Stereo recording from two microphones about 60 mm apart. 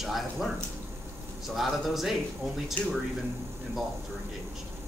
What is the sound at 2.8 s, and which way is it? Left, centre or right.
Speech, left.